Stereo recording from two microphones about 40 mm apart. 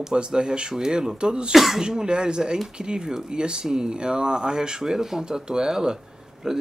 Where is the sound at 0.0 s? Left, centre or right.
Centre.